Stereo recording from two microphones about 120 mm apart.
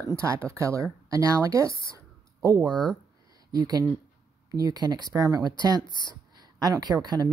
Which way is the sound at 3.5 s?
35° right (ahead or behind).